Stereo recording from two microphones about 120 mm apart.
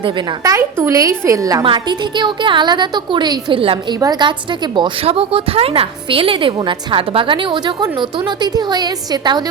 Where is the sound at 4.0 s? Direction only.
35° right (ahead or behind).